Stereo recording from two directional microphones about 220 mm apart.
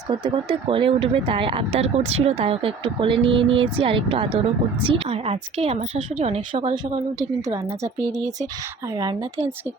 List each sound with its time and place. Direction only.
0.1 s speech: 20° right (ahead or behind)
9.0 s speech: 20° right (ahead or behind)